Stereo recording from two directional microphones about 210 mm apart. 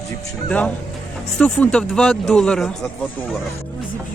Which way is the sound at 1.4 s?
5° left (ahead or behind).